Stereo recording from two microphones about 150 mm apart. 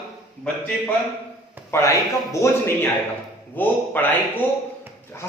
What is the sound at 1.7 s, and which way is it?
A man's voice, 15° left (ahead or behind).